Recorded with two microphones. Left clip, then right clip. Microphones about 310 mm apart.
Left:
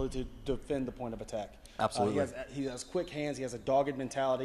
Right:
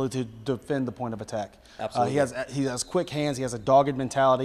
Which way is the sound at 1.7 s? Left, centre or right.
Centre.